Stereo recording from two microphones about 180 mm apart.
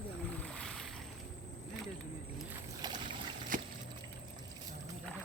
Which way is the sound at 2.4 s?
10° right (ahead or behind).